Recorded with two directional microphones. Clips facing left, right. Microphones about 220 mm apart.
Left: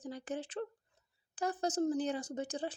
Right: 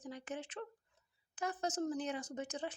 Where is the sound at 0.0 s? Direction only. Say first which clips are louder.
Left 4 dB; 35° left (ahead or behind).